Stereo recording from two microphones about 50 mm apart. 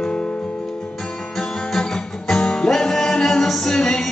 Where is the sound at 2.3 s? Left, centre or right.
Centre.